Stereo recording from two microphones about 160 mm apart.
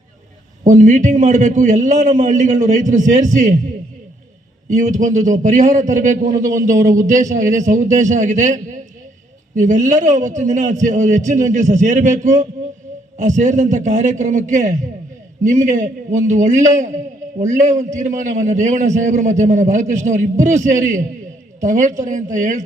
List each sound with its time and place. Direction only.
0.6 s a man's voice: 50° right (ahead or behind)
4.8 s a man's voice: 50° right (ahead or behind)